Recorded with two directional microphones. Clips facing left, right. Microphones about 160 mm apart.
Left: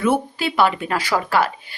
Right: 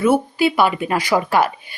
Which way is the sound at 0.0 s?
10° right (ahead or behind).